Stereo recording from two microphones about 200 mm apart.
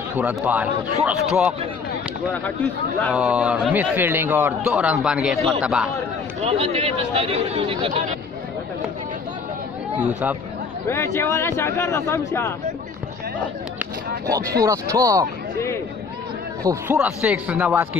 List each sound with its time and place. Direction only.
0.2 s a man's voice: 5° right (ahead or behind)
2.3 s speech: 10° left (ahead or behind)
3.1 s a man's voice: 5° right (ahead or behind)
6.4 s speech: 30° right (ahead or behind)
10.9 s speech: 10° left (ahead or behind)
14.6 s a man's voice: 15° right (ahead or behind)
16.6 s a man's voice: 10° right (ahead or behind)